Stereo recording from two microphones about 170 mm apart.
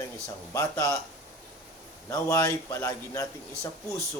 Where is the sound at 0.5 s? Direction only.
20° left (ahead or behind).